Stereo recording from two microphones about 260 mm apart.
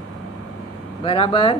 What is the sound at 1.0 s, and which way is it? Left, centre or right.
Speech, left.